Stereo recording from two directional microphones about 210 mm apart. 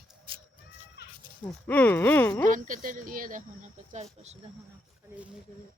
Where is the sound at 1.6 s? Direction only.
10° left (ahead or behind).